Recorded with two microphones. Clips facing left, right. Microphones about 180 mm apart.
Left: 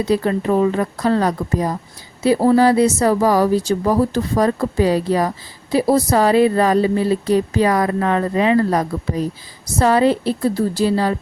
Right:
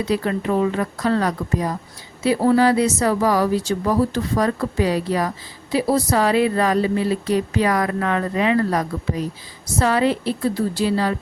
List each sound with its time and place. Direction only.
0.1 s a woman's voice: 35° left (ahead or behind)